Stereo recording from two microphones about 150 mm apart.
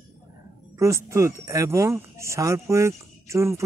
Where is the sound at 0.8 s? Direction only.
20° right (ahead or behind).